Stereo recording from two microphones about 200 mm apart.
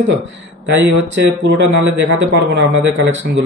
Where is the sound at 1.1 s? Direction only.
65° right (ahead or behind).